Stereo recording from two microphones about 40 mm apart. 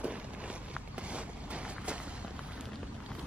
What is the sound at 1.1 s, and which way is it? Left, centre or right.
Vehicle, right.